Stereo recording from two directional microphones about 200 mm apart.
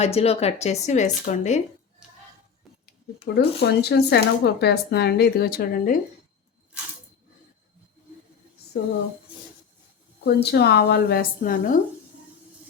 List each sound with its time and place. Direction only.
0.0 s speech: 30° left (ahead or behind)
2.6 s a sound: centre (ahead or behind)
3.3 s speech: 55° left (ahead or behind)
10.2 s a woman's voice: 55° left (ahead or behind)